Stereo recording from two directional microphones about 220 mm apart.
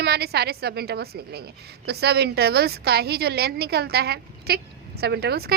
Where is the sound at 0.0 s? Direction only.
45° right (ahead or behind).